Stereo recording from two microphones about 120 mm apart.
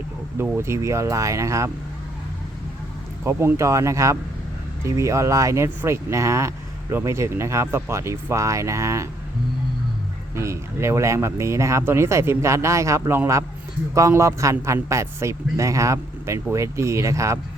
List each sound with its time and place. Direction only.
0.3 s a man's voice: 20° right (ahead or behind)
3.2 s a man's voice: 25° right (ahead or behind)
10.3 s a man's voice: 25° right (ahead or behind)